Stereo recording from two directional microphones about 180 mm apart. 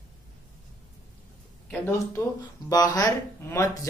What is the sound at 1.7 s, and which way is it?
Speech, 10° left (ahead or behind).